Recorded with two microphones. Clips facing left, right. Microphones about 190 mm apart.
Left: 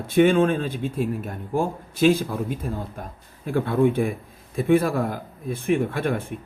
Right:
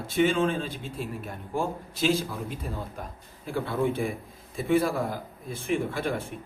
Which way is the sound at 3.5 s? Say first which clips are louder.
Left 7 dB; 55° left (ahead or behind).